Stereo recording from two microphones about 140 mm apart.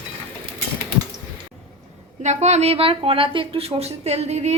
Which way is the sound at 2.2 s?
55° right (ahead or behind).